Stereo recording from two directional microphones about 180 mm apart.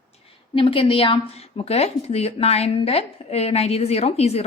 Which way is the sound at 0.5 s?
30° left (ahead or behind).